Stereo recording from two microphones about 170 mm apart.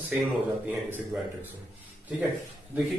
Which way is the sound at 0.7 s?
10° right (ahead or behind).